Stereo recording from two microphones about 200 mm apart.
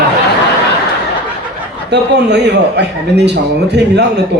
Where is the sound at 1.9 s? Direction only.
60° right (ahead or behind).